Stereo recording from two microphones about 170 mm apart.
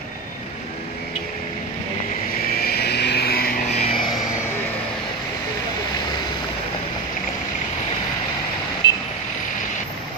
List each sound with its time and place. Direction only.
2.6 s vehicle: 70° left (ahead or behind)
3.6 s music: 40° left (ahead or behind)